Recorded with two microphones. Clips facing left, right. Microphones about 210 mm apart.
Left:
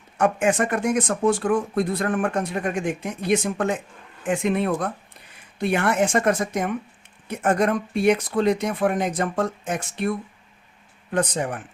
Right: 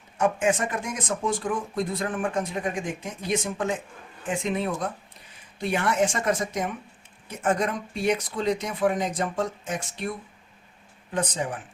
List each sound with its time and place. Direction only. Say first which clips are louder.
0.2 s speech: left 3 dB; 65° left (ahead or behind)
11.1 s speech: left 4 dB; 65° left (ahead or behind)